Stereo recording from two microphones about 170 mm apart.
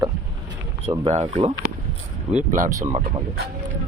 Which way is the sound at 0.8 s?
40° right (ahead or behind).